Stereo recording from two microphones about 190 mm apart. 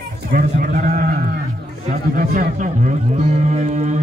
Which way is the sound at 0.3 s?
45° right (ahead or behind).